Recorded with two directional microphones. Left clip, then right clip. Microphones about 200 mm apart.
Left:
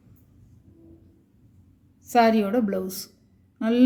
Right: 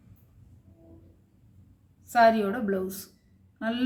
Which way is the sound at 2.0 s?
40° left (ahead or behind).